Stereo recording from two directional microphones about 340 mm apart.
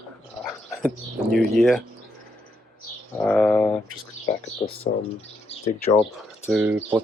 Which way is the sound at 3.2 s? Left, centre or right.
Centre.